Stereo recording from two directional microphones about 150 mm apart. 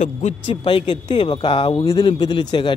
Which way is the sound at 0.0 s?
50° left (ahead or behind).